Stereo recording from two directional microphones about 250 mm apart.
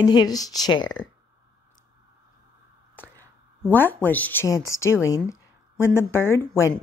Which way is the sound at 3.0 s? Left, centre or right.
Centre.